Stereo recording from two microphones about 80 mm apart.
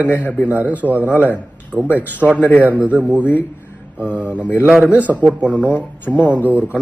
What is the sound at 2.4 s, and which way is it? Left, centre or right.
Speech, centre.